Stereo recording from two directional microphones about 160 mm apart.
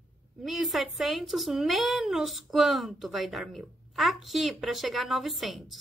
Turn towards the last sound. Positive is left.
turn(degrees=0)  # may be behind; listen again after turning